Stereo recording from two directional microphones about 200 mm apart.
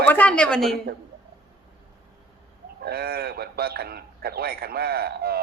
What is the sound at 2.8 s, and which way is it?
Speech, 50° right (ahead or behind).